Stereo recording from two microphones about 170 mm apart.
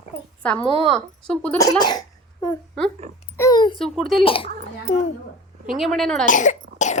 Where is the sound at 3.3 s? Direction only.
20° left (ahead or behind).